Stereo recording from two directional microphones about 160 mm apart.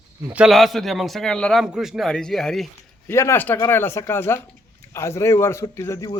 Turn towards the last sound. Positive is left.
turn(degrees=20)  # may be behind; listen again after turning